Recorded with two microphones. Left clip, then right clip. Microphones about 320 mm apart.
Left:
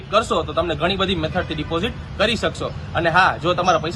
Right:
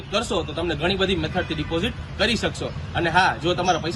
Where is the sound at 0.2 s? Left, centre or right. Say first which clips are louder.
Left 6 dB; centre.